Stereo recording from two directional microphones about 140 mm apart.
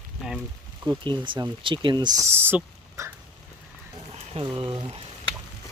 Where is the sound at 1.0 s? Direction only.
35° right (ahead or behind); by 3.1 s 15° right (ahead or behind).